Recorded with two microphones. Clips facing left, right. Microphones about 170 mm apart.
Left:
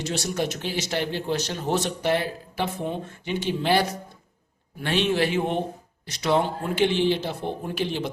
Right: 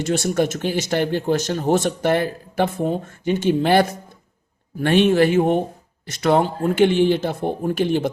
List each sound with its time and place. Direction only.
0.0 s speech: 50° right (ahead or behind)